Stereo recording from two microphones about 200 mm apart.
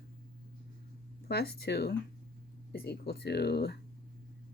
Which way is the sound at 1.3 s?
50° left (ahead or behind).